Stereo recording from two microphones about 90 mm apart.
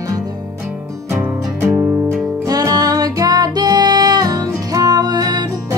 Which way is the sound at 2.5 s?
45° right (ahead or behind).